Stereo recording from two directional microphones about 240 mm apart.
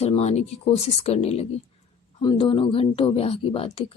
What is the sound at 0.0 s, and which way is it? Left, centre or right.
Speech, left.